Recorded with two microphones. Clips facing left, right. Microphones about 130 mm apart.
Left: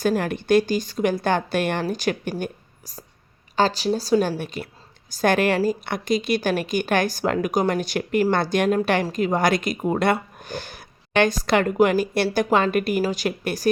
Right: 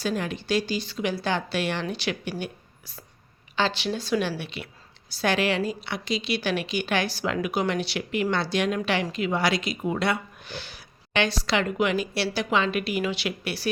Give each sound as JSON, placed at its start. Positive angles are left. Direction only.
{"t": 0.0, "sound": "speech", "side_deg": 50}
{"t": 2.4, "sound": "a sound", "side_deg": 40}
{"t": 3.5, "sound": "speech", "side_deg": 40}